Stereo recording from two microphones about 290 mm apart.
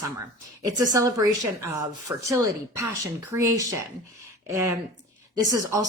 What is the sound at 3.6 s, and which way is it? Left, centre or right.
A woman's voice, centre.